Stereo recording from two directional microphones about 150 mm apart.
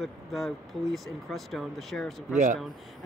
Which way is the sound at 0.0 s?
Centre (ahead or behind).